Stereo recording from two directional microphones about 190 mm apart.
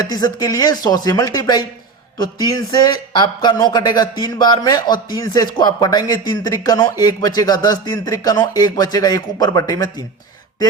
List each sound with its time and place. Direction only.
0.1 s speech: 20° left (ahead or behind)